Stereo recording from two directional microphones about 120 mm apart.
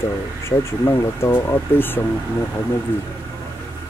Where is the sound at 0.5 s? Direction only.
20° left (ahead or behind).